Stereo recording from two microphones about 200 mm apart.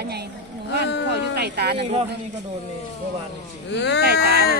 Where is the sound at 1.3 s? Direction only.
55° right (ahead or behind).